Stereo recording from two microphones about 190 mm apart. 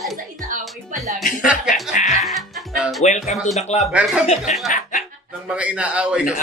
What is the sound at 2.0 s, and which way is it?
Music, 40° left (ahead or behind).